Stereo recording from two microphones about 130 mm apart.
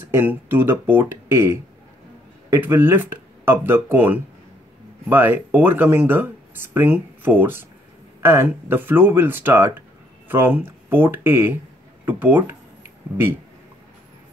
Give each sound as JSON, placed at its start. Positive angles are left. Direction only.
{"t": 0.1, "sound": "speech", "side_deg": -15}